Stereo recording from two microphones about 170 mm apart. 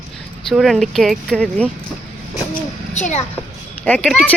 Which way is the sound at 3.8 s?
10° left (ahead or behind).